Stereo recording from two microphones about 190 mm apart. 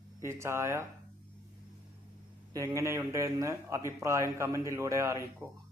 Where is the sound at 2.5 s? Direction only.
15° right (ahead or behind).